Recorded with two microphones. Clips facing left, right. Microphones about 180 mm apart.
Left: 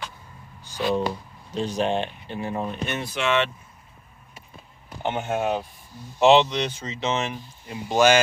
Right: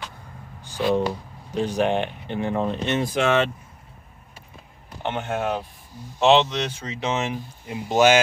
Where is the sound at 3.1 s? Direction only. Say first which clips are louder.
Right 2 dB; 45° right (ahead or behind).